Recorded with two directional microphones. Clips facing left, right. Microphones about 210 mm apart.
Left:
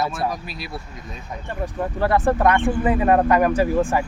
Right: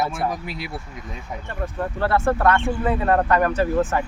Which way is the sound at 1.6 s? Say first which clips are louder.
Left 2 dB; 15° left (ahead or behind).